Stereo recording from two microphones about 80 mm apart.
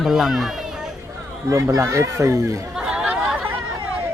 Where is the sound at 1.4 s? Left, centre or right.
Right.